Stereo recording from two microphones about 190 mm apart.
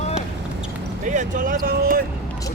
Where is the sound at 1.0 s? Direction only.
40° right (ahead or behind).